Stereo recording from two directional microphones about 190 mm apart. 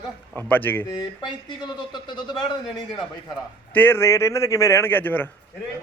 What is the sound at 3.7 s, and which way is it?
A man's voice, 10° left (ahead or behind).